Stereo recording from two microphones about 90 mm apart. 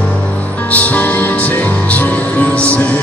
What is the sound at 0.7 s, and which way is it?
Music, 15° left (ahead or behind).